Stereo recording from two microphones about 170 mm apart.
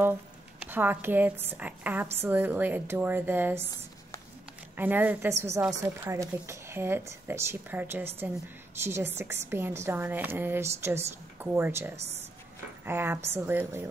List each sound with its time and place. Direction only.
0.6 s a woman's voice: 10° right (ahead or behind)
4.7 s a woman's voice: 10° right (ahead or behind)
12.0 s speech: 40° right (ahead or behind)
12.8 s a woman's voice: 15° right (ahead or behind)